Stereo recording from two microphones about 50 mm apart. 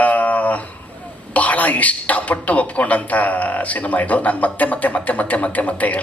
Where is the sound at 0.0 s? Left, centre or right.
Left.